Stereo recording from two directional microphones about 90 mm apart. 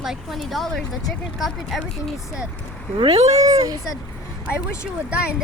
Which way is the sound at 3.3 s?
40° right (ahead or behind).